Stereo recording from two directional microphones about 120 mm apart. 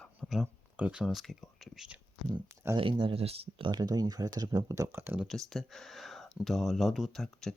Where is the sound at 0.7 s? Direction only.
10° right (ahead or behind).